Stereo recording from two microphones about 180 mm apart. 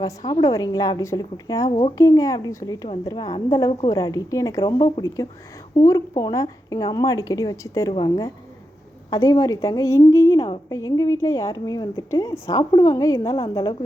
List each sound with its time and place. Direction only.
0.3 s a woman's voice: 20° left (ahead or behind)
13.2 s a woman's voice: 30° left (ahead or behind)